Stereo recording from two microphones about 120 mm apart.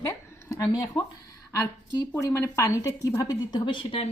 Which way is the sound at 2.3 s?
25° left (ahead or behind).